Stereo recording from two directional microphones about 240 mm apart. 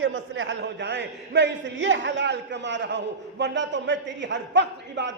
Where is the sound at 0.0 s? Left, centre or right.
Right.